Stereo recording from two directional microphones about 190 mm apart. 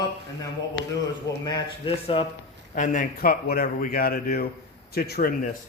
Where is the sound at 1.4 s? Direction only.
25° left (ahead or behind).